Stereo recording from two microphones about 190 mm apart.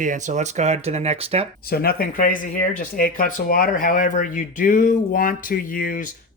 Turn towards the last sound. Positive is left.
turn(degrees=45)  # may be behind; listen again after turning